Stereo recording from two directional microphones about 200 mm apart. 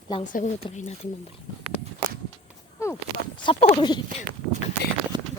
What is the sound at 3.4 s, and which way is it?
Speech, 25° left (ahead or behind).